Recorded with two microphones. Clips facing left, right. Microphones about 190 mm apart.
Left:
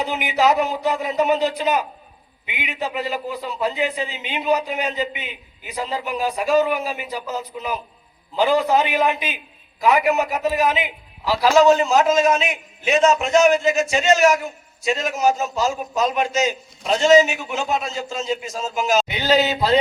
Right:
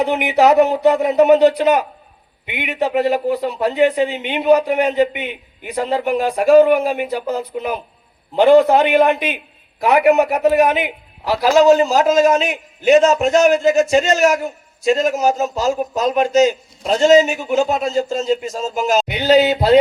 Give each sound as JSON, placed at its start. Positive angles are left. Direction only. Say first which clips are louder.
{"t": 0.0, "sound": "a man's voice", "louder": "right 6 dB", "side_deg": -60}
{"t": 11.6, "sound": "a man's voice", "louder": "right 3 dB", "side_deg": -35}